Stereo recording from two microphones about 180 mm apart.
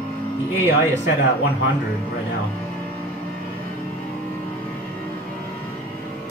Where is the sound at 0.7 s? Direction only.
85° left.